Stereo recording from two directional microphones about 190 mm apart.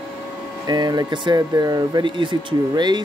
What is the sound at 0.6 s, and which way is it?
Speech, 20° right (ahead or behind).